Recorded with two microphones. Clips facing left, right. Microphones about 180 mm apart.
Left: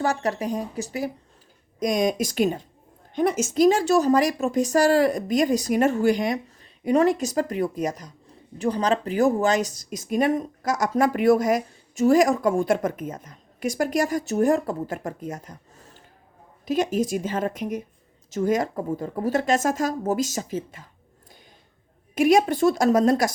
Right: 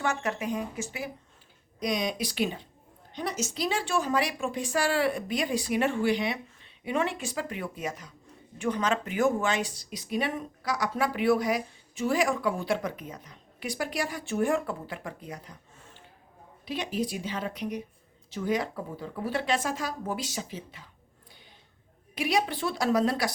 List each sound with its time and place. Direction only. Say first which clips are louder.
0.0 s a woman's voice: left 5 dB; 35° left (ahead or behind)
22.1 s speech: left 10 dB; 45° left (ahead or behind)